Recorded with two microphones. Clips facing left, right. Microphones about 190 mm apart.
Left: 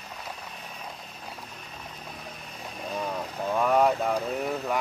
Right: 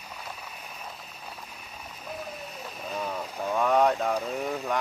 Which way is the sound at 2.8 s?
Centre (ahead or behind).